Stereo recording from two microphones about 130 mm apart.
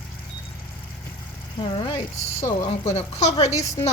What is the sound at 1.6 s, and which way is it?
A woman's voice, 40° left (ahead or behind).